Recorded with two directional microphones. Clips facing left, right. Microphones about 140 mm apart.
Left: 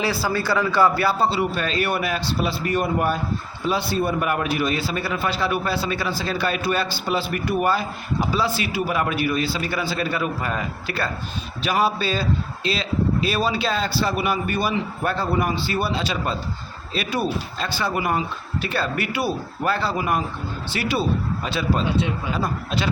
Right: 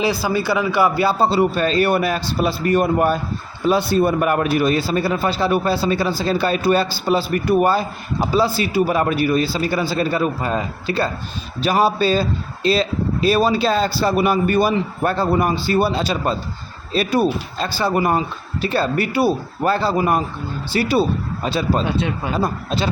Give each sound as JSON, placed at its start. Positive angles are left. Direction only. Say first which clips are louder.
{"t": 0.0, "sound": "a man's voice", "louder": "right 4 dB", "side_deg": -15}
{"t": 1.2, "sound": "a man's voice", "louder": "right 5 dB", "side_deg": -40}
{"t": 11.6, "sound": "a man's voice", "louder": "right 5 dB", "side_deg": -40}